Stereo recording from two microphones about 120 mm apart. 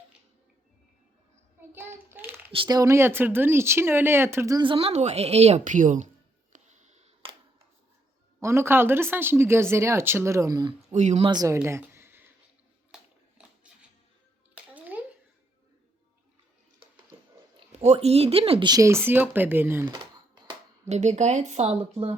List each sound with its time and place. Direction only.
1.7 s speech: 20° right (ahead or behind)
2.6 s speech: 30° right (ahead or behind)
4.5 s speech: 45° right (ahead or behind); by 6.1 s 90° right
6.5 s music: 80° right
8.4 s speech: 25° right (ahead or behind)
10.9 s speech: 80° right
11.2 s speech: 40° right (ahead or behind)
11.4 s a sound: 25° right (ahead or behind)
12.9 s a sound: 5° right (ahead or behind)
14.5 s a sound: 15° right (ahead or behind)
17.7 s speech: 60° right (ahead or behind)
18.7 s speech: 25° right (ahead or behind)
19.9 s a sound: 40° right (ahead or behind)
20.9 s speech: 75° right (ahead or behind); by 22.1 s 60° right (ahead or behind)